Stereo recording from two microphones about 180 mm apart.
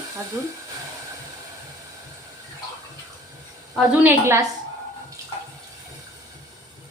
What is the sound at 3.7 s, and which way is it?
Speech, 10° right (ahead or behind).